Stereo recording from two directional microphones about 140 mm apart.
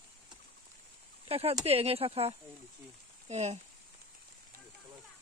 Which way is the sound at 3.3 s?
55° right (ahead or behind).